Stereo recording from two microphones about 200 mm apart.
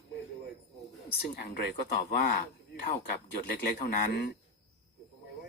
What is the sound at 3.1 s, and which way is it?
Speech, 45° left (ahead or behind).